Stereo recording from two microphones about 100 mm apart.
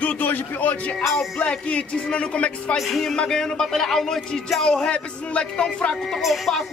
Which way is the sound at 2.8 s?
Centre (ahead or behind).